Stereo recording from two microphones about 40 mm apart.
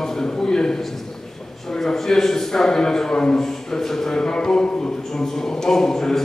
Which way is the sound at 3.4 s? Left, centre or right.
Centre.